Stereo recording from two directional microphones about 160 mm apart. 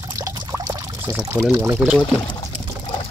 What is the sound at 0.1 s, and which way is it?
Pour, 20° right (ahead or behind).